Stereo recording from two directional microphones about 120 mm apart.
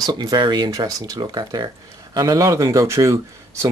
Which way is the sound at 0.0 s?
35° right (ahead or behind).